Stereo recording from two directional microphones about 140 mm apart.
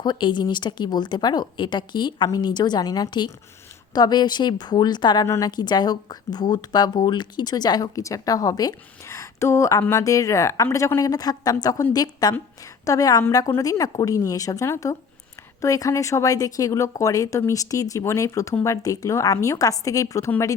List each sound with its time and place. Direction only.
0.0 s a woman's voice: 35° left (ahead or behind)